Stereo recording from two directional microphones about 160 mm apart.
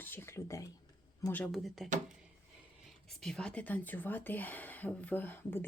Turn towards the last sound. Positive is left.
turn(degrees=15)  # may be behind; listen again after turning